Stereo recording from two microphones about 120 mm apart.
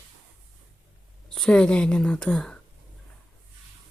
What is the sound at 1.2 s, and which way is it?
Speech, 5° left (ahead or behind).